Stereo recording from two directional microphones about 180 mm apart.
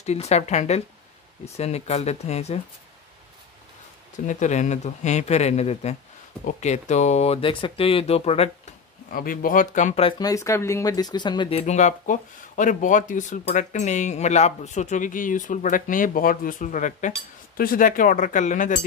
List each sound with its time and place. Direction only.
0.0 s speech: 35° left (ahead or behind)
4.3 s speech: 40° left (ahead or behind)
9.1 s speech: 50° left (ahead or behind)
10.1 s speech: 20° left (ahead or behind); by 18.9 s 45° left (ahead or behind)